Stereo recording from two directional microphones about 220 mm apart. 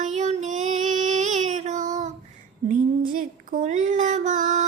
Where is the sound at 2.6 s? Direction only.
40° right (ahead or behind).